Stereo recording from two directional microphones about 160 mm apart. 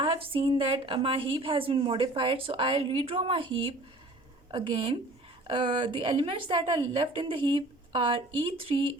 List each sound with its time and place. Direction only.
0.0 s a woman's voice: 35° right (ahead or behind)